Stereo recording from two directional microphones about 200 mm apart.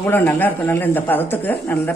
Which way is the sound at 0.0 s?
10° left (ahead or behind).